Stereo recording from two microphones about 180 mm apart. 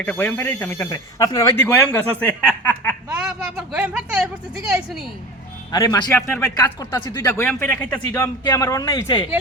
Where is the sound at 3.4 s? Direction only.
5° right (ahead or behind).